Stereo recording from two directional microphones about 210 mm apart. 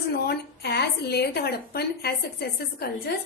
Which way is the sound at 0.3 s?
50° left (ahead or behind).